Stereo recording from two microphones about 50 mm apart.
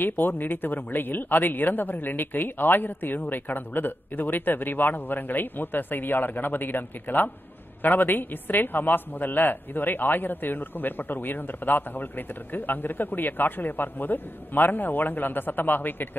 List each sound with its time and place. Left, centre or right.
0.0 s a woman's voice: left